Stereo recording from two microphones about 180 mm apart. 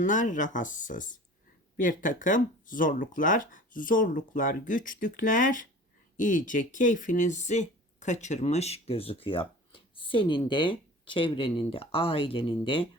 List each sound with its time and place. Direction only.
0.0 s speech: 45° left (ahead or behind); by 12.8 s 30° left (ahead or behind)